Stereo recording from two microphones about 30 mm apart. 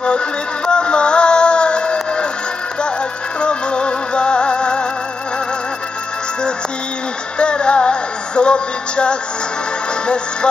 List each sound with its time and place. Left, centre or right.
0.7 s music: left
3.3 s music: left
7.3 s music: left